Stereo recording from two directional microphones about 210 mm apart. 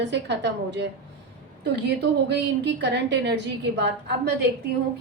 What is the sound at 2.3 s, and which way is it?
A woman's voice, 55° right (ahead or behind).